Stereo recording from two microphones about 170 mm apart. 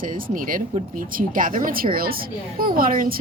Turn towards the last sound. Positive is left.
turn(degrees=-55)  # may be behind; listen again after turning